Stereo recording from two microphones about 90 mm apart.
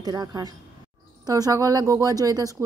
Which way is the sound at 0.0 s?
45° right (ahead or behind).